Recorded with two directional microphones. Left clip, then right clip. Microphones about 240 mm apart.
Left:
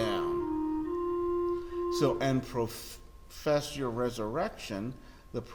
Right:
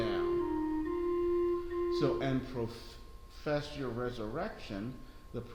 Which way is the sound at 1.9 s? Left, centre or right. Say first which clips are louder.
Left 5 dB; left.